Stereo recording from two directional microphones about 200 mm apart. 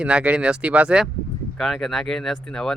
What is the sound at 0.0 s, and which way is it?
Speech, 5° right (ahead or behind).